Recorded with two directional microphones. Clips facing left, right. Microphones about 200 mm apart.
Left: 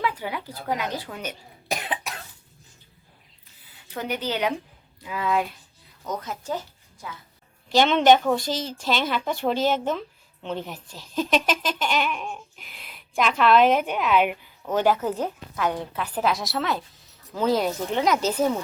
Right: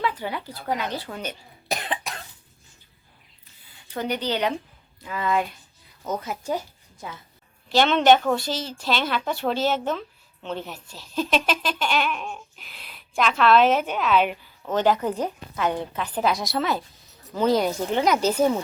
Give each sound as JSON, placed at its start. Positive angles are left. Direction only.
{"t": 0.0, "sound": "a woman's voice", "side_deg": 10}
{"t": 1.0, "sound": "cough", "side_deg": 5}
{"t": 3.8, "sound": "a woman's voice", "side_deg": 5}
{"t": 6.1, "sound": "speech", "side_deg": -10}
{"t": 7.0, "sound": "a woman's voice", "side_deg": -25}
{"t": 7.7, "sound": "a woman's voice", "side_deg": 15}